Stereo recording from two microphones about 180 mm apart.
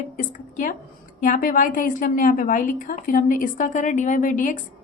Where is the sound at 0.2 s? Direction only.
45° left (ahead or behind).